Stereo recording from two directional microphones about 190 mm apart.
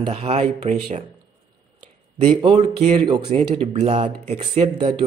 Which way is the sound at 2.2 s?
35° right (ahead or behind).